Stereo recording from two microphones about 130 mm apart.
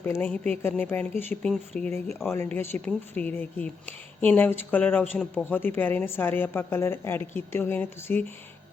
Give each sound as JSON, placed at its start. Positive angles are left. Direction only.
{"t": 0.0, "sound": "speech", "side_deg": 15}